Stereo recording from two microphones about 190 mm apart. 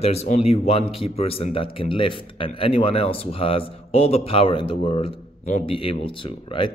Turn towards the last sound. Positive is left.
turn(degrees=25)  # may be behind; listen again after turning